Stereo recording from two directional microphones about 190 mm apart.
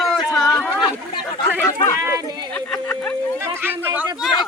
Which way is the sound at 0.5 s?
5° left (ahead or behind).